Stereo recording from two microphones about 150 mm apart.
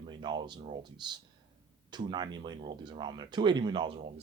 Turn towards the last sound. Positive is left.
turn(degrees=-30)  # may be behind; listen again after turning